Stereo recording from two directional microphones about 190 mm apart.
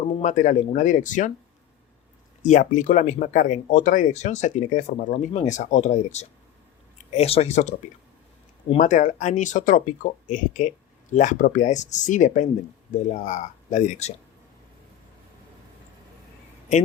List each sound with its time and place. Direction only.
0.2 s speech: 40° left (ahead or behind)
2.4 s speech: 40° left (ahead or behind)
8.7 s speech: 40° left (ahead or behind)